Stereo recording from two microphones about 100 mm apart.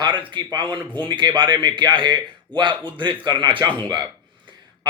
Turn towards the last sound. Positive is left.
turn(degrees=-45)  # may be behind; listen again after turning